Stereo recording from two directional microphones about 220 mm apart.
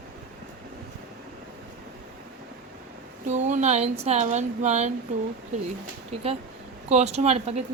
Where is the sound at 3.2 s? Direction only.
30° right (ahead or behind).